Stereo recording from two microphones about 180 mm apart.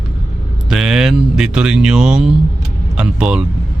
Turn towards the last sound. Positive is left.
turn(degrees=-5)  # may be behind; listen again after turning